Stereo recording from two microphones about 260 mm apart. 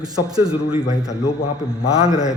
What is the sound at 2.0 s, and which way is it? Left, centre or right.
Speech, centre.